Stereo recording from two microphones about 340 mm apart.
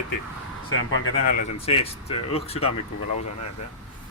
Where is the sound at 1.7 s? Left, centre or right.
Centre.